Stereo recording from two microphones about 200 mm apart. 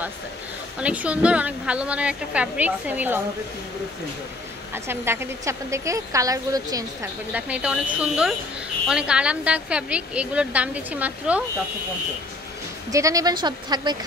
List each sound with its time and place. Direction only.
0.7 s a woman's voice: 5° right (ahead or behind)
4.7 s a woman's voice: 10° right (ahead or behind)
12.9 s speech: 15° right (ahead or behind)